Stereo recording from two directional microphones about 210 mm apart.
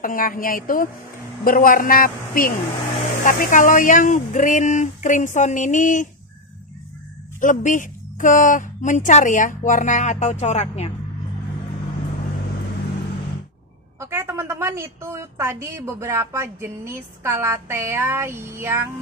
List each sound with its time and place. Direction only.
0.0 s a woman's voice: 40° left (ahead or behind)
7.3 s a woman's voice: 35° left (ahead or behind)
13.9 s a woman's voice: 10° right (ahead or behind)